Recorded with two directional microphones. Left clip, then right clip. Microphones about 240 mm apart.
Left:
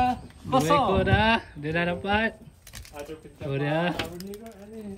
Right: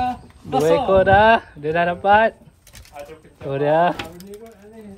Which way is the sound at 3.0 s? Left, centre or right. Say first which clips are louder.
Right 4 dB; centre.